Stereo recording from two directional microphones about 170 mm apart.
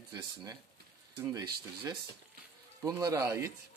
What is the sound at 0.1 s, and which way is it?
Speech, 25° right (ahead or behind).